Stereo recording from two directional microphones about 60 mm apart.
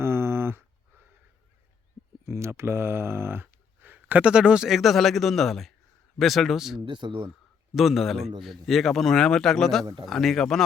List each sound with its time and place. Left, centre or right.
0.0 s a sound: right
2.2 s speech: right; by 4.7 s centre
4.7 s speech: centre